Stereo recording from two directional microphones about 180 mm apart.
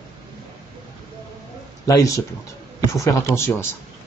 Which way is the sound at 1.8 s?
20° left (ahead or behind).